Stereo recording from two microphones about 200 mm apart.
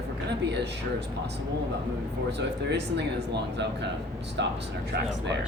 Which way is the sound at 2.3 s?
60° right (ahead or behind).